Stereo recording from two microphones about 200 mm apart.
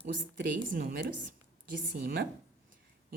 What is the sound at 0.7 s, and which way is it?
Speech, 45° right (ahead or behind).